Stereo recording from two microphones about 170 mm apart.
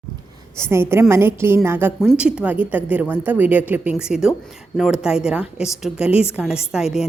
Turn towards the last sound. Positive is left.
turn(degrees=-5)  # may be behind; listen again after turning